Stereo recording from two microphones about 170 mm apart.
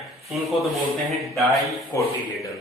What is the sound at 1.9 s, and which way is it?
Speech, 20° left (ahead or behind).